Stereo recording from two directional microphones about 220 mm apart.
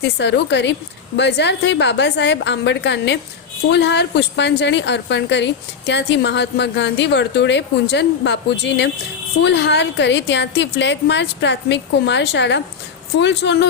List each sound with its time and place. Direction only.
0.0 s a woman's voice: 50° left (ahead or behind)